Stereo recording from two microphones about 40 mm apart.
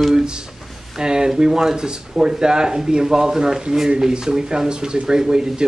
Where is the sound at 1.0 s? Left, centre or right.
Centre.